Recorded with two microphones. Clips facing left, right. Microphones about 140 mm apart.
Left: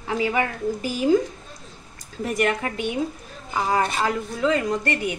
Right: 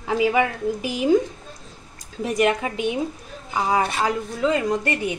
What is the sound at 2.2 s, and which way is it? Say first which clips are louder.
A woman's voice: right 3 dB; 15° right (ahead or behind).